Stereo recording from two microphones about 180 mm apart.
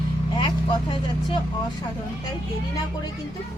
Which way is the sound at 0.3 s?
30° left (ahead or behind).